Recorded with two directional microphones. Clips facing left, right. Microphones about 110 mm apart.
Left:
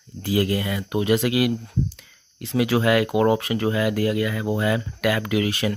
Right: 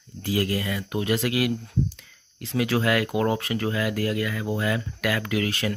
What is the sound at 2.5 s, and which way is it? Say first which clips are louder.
Speech: left 4 dB; 15° left (ahead or behind).